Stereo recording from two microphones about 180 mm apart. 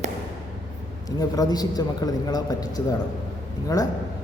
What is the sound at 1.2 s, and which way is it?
A man's voice, 20° left (ahead or behind).